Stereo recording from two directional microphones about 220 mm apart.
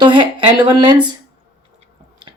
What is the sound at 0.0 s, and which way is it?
Speech, 20° right (ahead or behind).